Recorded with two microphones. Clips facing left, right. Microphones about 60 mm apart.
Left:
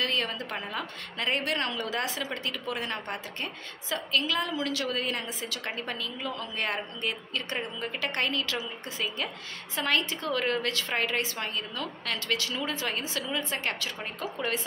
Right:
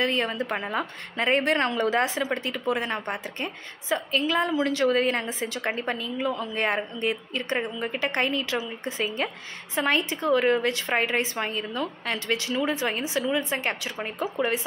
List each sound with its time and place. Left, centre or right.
0.0 s a woman's voice: right